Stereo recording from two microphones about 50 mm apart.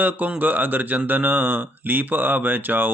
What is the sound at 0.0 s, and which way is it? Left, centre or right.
Speech, right.